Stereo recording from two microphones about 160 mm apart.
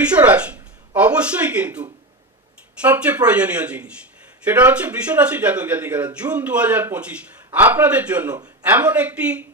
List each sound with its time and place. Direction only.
0.0 s speech: 10° right (ahead or behind)
2.8 s a man's voice: 10° right (ahead or behind)